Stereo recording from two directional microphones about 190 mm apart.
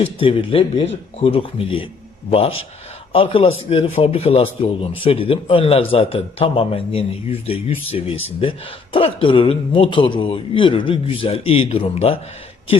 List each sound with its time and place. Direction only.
0.0 s a man's voice: 30° left (ahead or behind)
3.1 s a man's voice: 30° left (ahead or behind)